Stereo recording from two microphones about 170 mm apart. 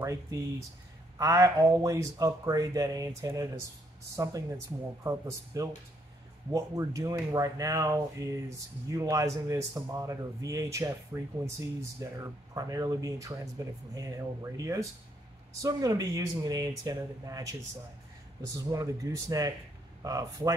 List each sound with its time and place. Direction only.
0.0 s speech: 20° right (ahead or behind)